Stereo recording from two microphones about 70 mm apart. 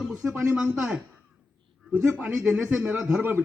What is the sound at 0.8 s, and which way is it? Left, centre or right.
Speech, centre.